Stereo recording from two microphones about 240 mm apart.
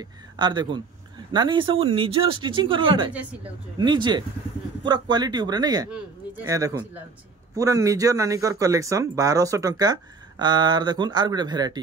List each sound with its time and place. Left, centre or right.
0.0 s speech: centre